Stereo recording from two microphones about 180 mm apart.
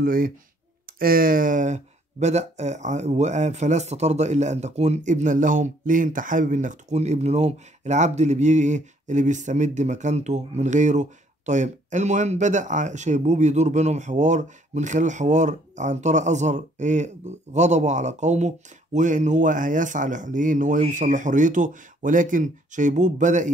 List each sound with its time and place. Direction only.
0.0 s speech: 50° right (ahead or behind)